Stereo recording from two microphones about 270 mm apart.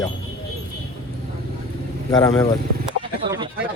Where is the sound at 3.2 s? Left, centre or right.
Centre.